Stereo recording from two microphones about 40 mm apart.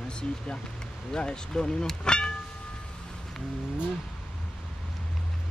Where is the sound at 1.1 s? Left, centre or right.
Centre.